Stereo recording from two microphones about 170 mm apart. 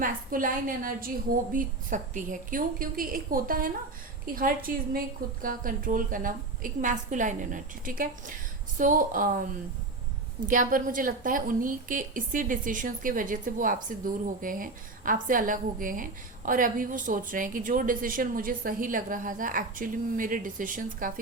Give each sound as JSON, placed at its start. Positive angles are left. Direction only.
{"t": 0.0, "sound": "a woman's voice", "side_deg": -55}
{"t": 10.4, "sound": "a woman's voice", "side_deg": -55}